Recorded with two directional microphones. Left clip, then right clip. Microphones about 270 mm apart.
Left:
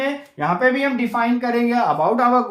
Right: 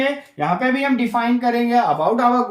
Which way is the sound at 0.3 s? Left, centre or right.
Centre.